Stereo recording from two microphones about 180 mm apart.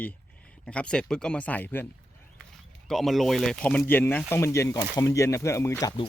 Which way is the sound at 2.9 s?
Centre (ahead or behind).